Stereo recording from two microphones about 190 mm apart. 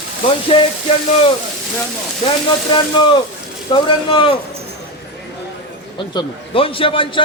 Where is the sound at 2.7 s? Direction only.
25° left (ahead or behind).